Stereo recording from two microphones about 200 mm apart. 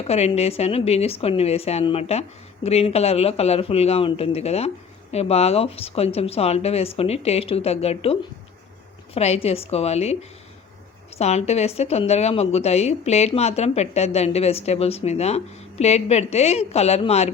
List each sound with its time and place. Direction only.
0.1 s a woman's voice: 30° left (ahead or behind)
11.2 s a woman's voice: 35° left (ahead or behind)